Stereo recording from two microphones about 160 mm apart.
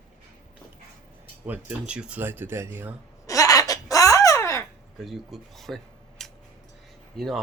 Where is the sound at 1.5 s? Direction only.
10° right (ahead or behind).